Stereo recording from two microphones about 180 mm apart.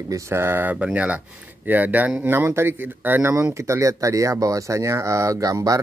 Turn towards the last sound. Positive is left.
turn(degrees=-20)  # may be behind; listen again after turning